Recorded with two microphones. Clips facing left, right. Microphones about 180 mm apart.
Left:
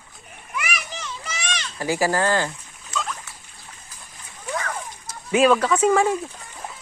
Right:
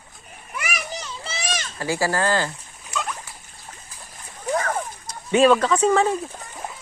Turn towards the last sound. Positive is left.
turn(degrees=10)  # may be behind; listen again after turning